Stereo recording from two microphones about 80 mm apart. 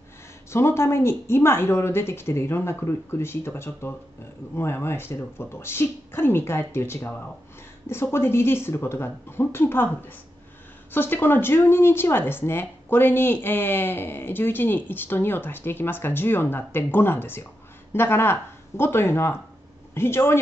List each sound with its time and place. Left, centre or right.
0.5 s speech: left